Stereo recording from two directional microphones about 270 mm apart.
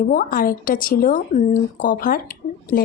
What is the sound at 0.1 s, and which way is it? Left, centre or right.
A woman's voice, left.